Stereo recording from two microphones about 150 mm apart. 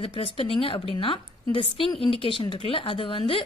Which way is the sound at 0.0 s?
35° left (ahead or behind).